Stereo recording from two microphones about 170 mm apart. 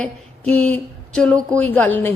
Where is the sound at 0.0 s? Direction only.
5° left (ahead or behind).